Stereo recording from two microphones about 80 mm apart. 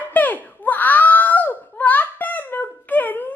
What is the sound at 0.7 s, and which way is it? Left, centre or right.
Wail, left.